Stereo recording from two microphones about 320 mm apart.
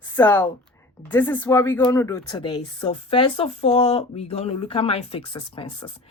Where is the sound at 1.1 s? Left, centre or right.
Centre.